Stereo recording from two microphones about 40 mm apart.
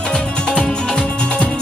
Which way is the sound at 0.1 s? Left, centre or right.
Left.